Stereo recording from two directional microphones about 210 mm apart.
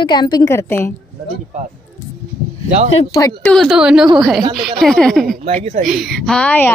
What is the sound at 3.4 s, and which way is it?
Speech, centre (ahead or behind).